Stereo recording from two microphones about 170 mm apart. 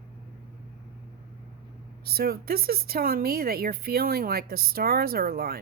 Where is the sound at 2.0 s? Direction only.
65° right (ahead or behind).